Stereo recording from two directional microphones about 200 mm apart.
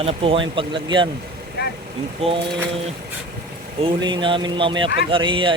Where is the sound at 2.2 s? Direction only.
30° right (ahead or behind).